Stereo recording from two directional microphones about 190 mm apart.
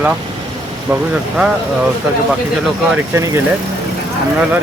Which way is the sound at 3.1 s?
15° right (ahead or behind).